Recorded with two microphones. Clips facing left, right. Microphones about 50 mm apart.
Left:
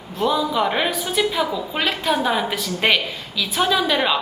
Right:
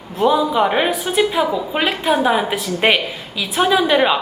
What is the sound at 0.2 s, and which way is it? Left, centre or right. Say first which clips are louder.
A woman's voice: right 5 dB; centre.